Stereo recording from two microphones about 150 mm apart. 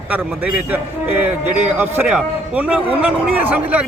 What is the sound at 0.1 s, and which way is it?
Speech, 10° right (ahead or behind).